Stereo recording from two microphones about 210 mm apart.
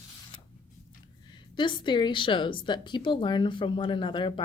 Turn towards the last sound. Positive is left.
turn(degrees=25)  # may be behind; listen again after turning